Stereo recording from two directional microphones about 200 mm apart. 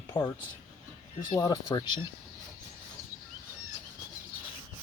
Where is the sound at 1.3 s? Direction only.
15° left (ahead or behind).